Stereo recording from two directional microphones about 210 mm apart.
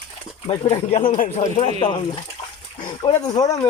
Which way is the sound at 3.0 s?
20° left (ahead or behind).